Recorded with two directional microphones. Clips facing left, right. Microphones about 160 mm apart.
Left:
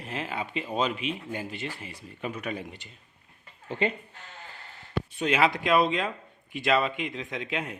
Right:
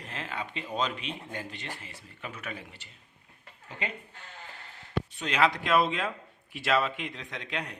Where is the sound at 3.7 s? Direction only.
30° left (ahead or behind).